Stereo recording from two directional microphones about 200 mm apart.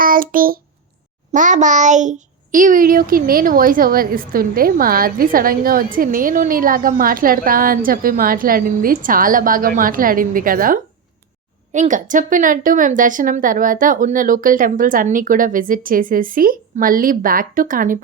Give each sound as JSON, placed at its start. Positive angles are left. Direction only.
{"t": 0.0, "sound": "a child's voice", "side_deg": -45}